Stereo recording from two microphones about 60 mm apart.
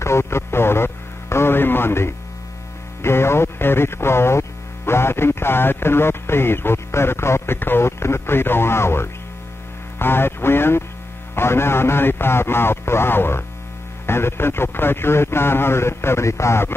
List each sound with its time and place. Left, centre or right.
0.0 s radio: left
3.0 s music: left
9.9 s a man's voice: left